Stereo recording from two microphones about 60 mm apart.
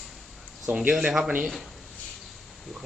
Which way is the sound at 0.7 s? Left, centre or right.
Right.